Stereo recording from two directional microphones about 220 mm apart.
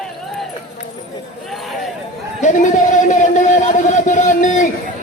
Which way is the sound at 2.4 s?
35° left (ahead or behind).